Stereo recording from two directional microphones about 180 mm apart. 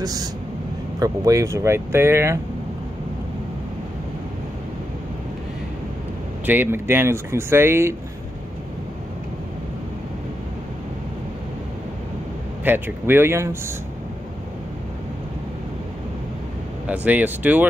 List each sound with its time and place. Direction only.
0.0 s speech: 20° right (ahead or behind)
6.4 s speech: 10° right (ahead or behind)
12.6 s speech: 10° right (ahead or behind)
16.8 s speech: 10° right (ahead or behind)